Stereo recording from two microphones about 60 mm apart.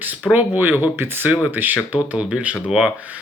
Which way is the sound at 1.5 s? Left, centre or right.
Right.